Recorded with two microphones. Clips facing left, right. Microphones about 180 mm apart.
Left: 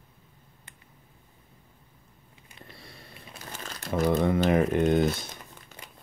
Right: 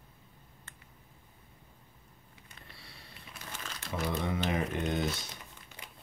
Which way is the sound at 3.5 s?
40° left (ahead or behind).